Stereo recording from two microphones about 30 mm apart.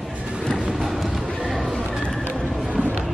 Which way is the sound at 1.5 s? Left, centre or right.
Centre.